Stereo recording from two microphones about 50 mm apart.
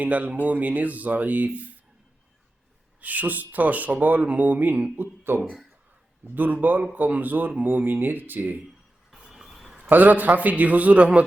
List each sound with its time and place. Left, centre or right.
0.0 s a man's voice: right
3.0 s speech: right
4.9 s speech: right
6.3 s speech: right
9.3 s a sound: centre
9.9 s a man's voice: right